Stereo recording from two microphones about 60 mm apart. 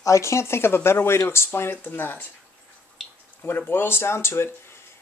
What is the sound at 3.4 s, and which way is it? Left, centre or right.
Speech, left.